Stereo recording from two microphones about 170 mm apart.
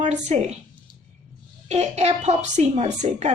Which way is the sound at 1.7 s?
40° right (ahead or behind).